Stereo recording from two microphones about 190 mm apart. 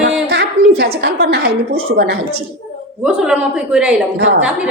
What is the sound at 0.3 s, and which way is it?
A woman's voice, 60° right (ahead or behind).